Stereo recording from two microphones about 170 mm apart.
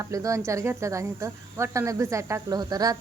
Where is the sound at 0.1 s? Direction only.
20° right (ahead or behind).